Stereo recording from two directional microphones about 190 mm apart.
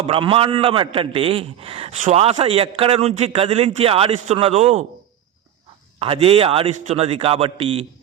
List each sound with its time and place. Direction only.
0.0 s a man's voice: 30° right (ahead or behind)
6.0 s a man's voice: 30° right (ahead or behind)